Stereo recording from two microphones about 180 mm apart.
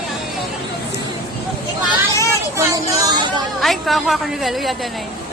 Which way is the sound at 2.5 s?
20° right (ahead or behind).